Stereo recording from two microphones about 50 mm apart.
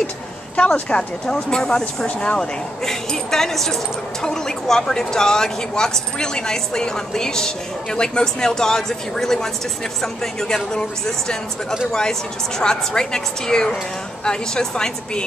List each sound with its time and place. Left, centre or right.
0.7 s speech: left
1.2 s speech: centre
2.0 s speech: left
2.8 s speech: centre